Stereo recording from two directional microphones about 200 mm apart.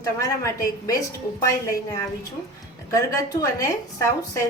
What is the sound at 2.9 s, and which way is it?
A woman's voice, 15° left (ahead or behind).